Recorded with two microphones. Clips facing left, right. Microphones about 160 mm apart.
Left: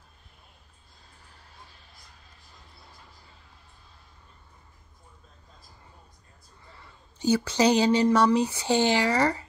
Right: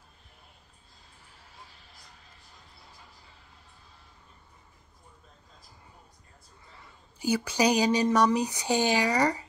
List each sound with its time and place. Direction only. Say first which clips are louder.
7.2 s speech: left 3 dB; 10° right (ahead or behind)